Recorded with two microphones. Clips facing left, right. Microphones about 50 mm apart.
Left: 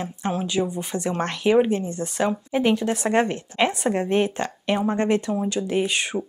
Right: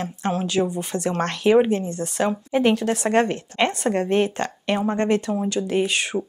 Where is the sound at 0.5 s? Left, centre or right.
Centre.